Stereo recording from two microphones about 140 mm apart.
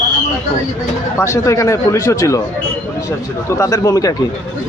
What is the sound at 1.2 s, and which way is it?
Speech, 20° left (ahead or behind).